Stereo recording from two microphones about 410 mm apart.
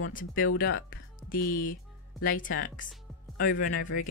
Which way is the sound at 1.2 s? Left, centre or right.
Centre.